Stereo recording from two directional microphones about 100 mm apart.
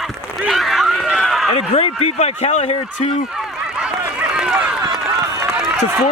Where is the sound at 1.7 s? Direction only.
90° left.